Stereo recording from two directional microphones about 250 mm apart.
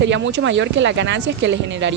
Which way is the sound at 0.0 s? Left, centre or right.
Right.